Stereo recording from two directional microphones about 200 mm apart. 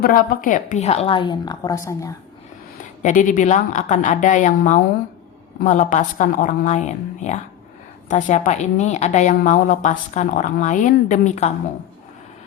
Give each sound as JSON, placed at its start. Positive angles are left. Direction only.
{"t": 0.0, "sound": "a woman's voice", "side_deg": 45}
{"t": 3.0, "sound": "a woman's voice", "side_deg": 40}